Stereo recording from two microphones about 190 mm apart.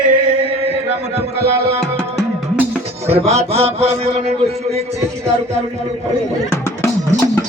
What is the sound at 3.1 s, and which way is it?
Mantra, 35° right (ahead or behind).